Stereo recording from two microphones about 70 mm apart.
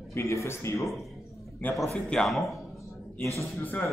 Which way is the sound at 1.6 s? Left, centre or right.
Left.